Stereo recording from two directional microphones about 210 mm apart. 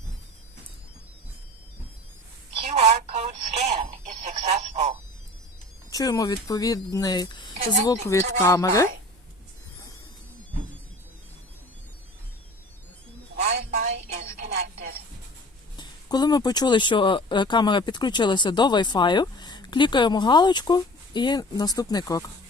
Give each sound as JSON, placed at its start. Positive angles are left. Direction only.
{"t": 2.7, "sound": "telephone", "side_deg": -30}
{"t": 5.9, "sound": "speech", "side_deg": 15}
{"t": 13.7, "sound": "a sound", "side_deg": -35}
{"t": 15.7, "sound": "speech", "side_deg": 20}